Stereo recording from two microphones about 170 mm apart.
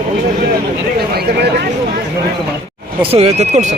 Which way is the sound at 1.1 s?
70° right (ahead or behind).